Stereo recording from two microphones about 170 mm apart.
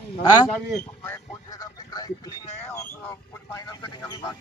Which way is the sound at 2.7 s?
15° left (ahead or behind).